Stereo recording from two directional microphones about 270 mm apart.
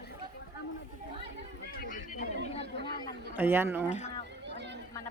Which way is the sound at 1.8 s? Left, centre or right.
Left.